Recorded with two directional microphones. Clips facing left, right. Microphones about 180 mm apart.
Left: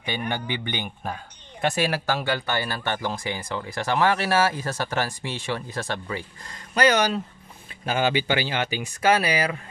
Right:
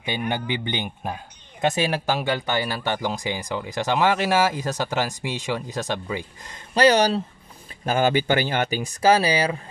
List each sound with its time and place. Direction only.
0.1 s speech: 15° right (ahead or behind)
6.7 s speech: 35° right (ahead or behind)
7.8 s speech: 45° right (ahead or behind)